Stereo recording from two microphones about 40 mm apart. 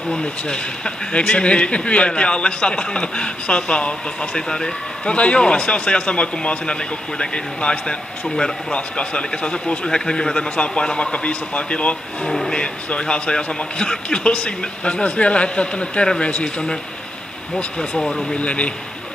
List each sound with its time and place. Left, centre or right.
0.1 s a man's voice: left
5.0 s a man's voice: left
12.3 s speech: centre
12.5 s a man's voice: left
17.7 s speech: centre
18.3 s a man's voice: left